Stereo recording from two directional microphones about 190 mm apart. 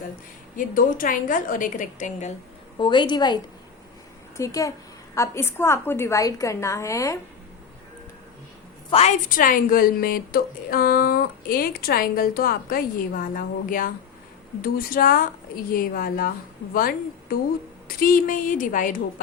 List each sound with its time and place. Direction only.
0.5 s speech: 45° left (ahead or behind)
2.7 s a woman's voice: 25° left (ahead or behind)
8.9 s a woman's voice: 30° left (ahead or behind)
9.3 s speech: 45° left (ahead or behind)